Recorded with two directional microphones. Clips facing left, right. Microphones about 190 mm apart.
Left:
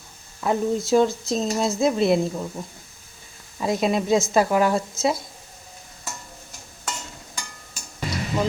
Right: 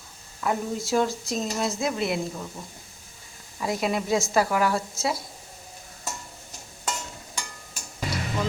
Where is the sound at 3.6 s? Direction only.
25° left (ahead or behind).